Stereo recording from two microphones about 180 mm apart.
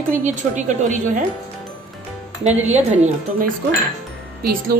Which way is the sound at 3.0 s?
50° right (ahead or behind).